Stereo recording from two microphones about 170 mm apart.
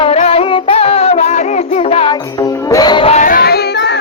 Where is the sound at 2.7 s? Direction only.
25° left (ahead or behind).